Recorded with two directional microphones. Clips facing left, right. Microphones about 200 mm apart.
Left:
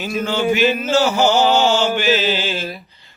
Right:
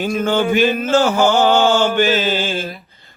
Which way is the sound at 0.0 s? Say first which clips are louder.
Right 3 dB; 50° right (ahead or behind).